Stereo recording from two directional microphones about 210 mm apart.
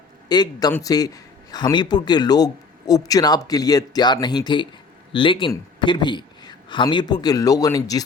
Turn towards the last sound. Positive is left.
turn(degrees=15)  # may be behind; listen again after turning